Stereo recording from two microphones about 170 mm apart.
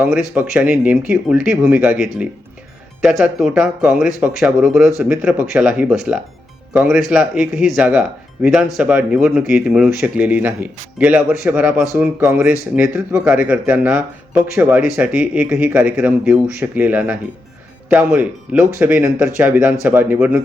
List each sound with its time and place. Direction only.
0.0 s speech: 10° right (ahead or behind)